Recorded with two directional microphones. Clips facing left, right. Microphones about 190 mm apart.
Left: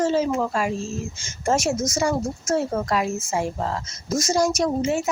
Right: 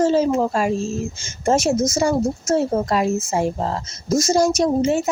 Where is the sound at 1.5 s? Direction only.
25° right (ahead or behind).